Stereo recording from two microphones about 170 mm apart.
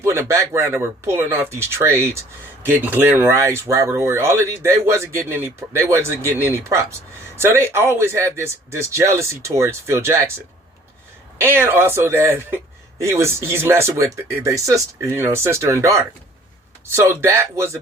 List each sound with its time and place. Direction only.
0.0 s speech: 15° right (ahead or behind)